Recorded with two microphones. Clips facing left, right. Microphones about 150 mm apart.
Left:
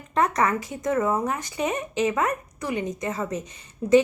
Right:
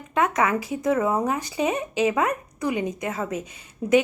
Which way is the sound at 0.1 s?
5° right (ahead or behind).